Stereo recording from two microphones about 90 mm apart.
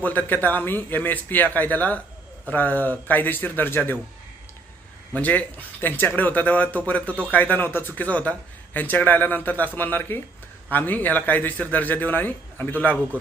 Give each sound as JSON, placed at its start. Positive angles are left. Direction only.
{"t": 0.0, "sound": "a man's voice", "side_deg": 20}
{"t": 5.1, "sound": "a man's voice", "side_deg": 15}